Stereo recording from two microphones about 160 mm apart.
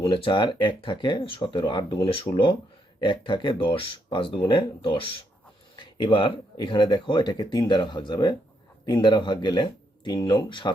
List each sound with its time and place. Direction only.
0.0 s speech: 30° left (ahead or behind)